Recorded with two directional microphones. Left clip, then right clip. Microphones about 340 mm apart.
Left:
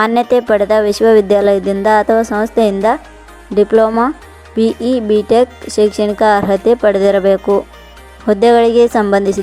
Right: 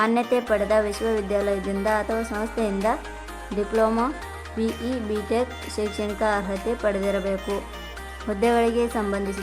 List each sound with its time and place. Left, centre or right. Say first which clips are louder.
0.0 s speech: left 10 dB; left
3.8 s speech: left 11 dB; centre